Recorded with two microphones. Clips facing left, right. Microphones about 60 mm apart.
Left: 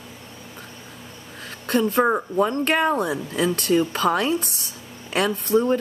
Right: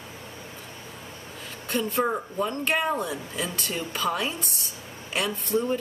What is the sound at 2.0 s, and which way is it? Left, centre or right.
Speech, left.